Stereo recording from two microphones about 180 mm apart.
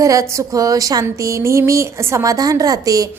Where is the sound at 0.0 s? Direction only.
20° right (ahead or behind).